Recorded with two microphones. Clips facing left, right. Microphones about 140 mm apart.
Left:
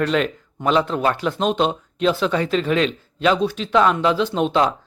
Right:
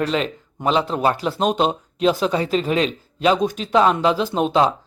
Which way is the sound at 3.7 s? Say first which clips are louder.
Even; 30° right (ahead or behind).